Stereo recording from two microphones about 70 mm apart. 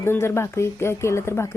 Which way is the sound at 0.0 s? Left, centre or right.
Left.